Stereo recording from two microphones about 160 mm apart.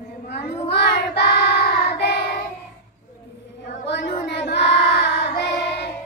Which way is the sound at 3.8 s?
90° left.